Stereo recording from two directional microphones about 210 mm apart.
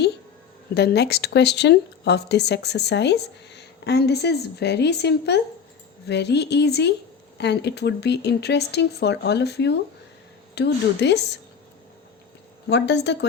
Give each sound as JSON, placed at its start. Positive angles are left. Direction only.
{"t": 0.7, "sound": "speech", "side_deg": 50}
{"t": 12.7, "sound": "a woman's voice", "side_deg": 55}